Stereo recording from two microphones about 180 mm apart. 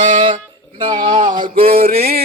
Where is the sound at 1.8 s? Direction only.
55° right (ahead or behind).